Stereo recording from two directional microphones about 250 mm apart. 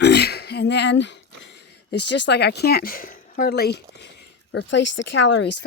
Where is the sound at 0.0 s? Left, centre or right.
Left.